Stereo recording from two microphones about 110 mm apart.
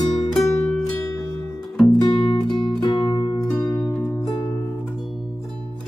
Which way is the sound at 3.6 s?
30° left (ahead or behind).